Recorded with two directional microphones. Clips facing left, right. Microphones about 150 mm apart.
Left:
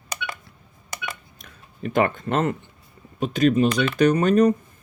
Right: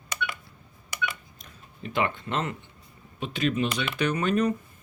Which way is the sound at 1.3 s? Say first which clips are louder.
Left 5 dB; 50° left (ahead or behind).